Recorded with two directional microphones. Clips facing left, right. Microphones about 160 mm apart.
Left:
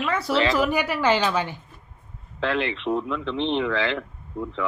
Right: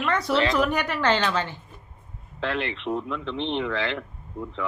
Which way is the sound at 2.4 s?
90° left.